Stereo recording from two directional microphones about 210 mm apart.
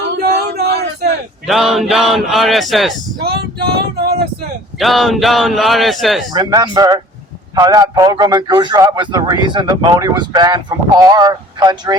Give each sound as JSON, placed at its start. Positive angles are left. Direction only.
{"t": 0.2, "sound": "a sound", "side_deg": -50}
{"t": 1.5, "sound": "speech", "side_deg": 0}
{"t": 3.2, "sound": "vehicle", "side_deg": -50}
{"t": 4.8, "sound": "speech", "side_deg": 0}
{"t": 6.3, "sound": "a man's voice", "side_deg": -20}